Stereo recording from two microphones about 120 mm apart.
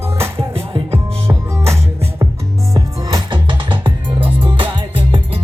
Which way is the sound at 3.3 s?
45° right (ahead or behind).